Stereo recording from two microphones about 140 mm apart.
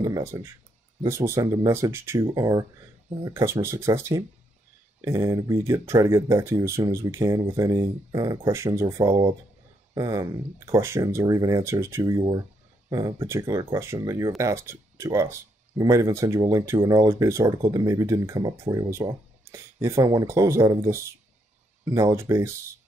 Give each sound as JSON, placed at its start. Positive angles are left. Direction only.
{"t": 0.0, "sound": "speech", "side_deg": -20}